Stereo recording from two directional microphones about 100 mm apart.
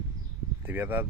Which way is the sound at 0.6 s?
20° right (ahead or behind).